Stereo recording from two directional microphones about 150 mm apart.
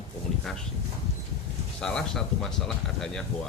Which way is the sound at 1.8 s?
5° left (ahead or behind).